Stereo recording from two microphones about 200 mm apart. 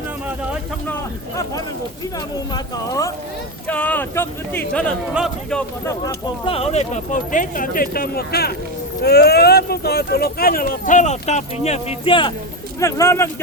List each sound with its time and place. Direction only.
2.1 s speech: 20° left (ahead or behind)
6.4 s speech: 30° left (ahead or behind)
12.8 s speech: 15° left (ahead or behind)